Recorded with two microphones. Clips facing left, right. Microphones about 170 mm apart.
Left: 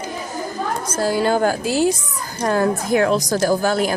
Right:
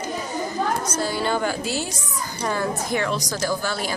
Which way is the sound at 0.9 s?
45° left (ahead or behind).